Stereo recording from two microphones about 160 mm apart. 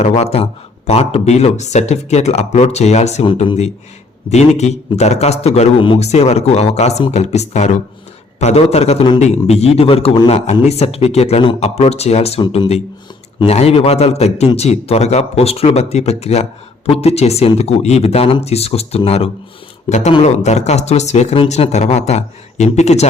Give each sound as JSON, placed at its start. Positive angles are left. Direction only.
{"t": 0.0, "sound": "a man's voice", "side_deg": 40}